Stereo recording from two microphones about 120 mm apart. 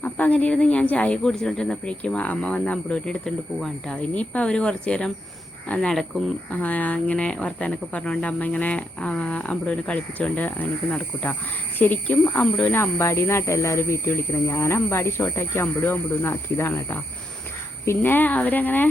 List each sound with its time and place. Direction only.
0.0 s speech: 10° left (ahead or behind)